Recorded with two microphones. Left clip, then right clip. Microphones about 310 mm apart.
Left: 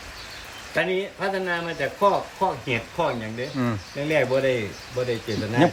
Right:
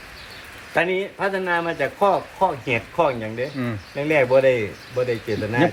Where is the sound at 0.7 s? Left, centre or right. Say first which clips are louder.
Right 3 dB; centre.